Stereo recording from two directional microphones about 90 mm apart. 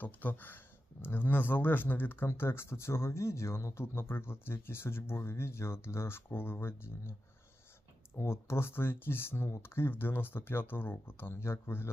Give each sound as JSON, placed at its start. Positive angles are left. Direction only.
{"t": 0.0, "sound": "speech", "side_deg": 20}